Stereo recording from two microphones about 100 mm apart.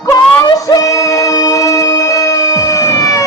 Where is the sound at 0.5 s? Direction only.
35° left (ahead or behind).